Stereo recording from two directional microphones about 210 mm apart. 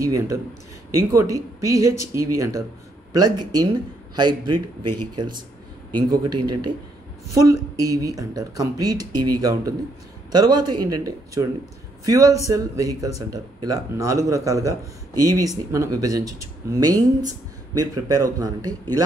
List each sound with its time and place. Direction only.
0.0 s speech: 15° right (ahead or behind)